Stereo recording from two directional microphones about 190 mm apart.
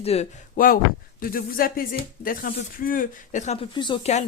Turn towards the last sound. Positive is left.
turn(degrees=25)  # may be behind; listen again after turning